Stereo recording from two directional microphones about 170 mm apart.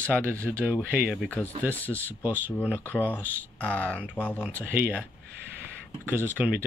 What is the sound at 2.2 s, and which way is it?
Speech, 10° right (ahead or behind).